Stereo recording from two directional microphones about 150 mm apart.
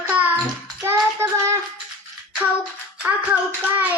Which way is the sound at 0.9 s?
20° right (ahead or behind).